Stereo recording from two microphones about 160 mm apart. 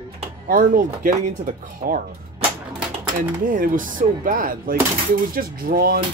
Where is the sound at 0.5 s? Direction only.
60° right (ahead or behind).